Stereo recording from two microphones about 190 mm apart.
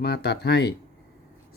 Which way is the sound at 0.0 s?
60° left (ahead or behind).